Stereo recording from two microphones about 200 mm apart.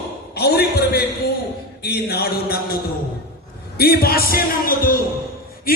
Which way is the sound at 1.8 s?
50° left (ahead or behind).